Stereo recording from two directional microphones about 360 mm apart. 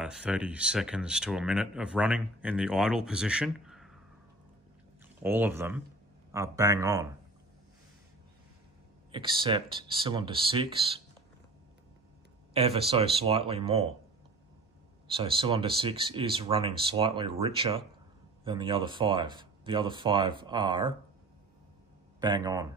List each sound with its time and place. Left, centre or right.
0.0 s speech: centre
5.2 s speech: centre
9.1 s speech: centre
12.5 s speech: centre
15.0 s speech: centre
22.2 s speech: centre